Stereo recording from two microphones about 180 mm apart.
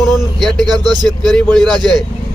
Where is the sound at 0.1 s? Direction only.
Centre (ahead or behind).